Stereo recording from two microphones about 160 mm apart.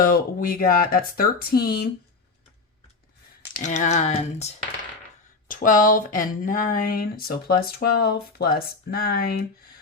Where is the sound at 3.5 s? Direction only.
50° left (ahead or behind).